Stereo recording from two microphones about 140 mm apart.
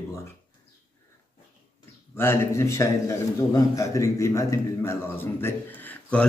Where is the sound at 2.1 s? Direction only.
20° left (ahead or behind).